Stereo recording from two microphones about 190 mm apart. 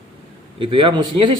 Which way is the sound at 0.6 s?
25° right (ahead or behind).